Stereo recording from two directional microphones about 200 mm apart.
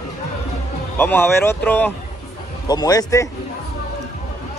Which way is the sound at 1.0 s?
10° left (ahead or behind).